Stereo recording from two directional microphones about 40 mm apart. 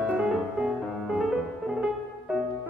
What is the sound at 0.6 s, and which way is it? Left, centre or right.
Music, right.